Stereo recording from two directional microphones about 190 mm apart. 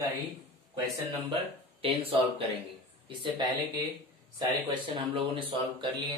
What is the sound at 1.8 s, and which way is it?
Speech, 30° right (ahead or behind).